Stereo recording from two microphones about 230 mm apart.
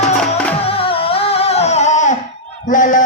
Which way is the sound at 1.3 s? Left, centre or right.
Left.